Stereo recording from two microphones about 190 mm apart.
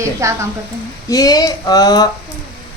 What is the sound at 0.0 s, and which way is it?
Speech, 15° right (ahead or behind).